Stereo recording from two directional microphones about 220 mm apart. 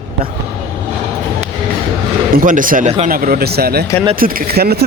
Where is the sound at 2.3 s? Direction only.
40° right (ahead or behind).